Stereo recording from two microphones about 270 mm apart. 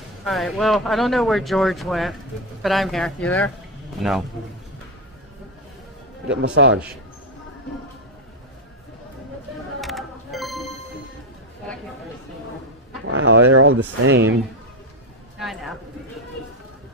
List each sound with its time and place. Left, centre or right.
0.2 s speech: centre
6.2 s a man's voice: right
9.8 s music: centre
13.0 s a man's voice: right
15.3 s a sound: centre